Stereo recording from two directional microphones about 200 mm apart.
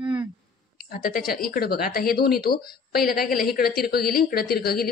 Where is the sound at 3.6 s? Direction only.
50° left (ahead or behind).